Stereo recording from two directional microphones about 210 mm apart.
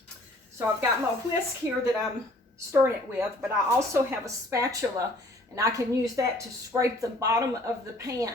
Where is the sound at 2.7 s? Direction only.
15° right (ahead or behind).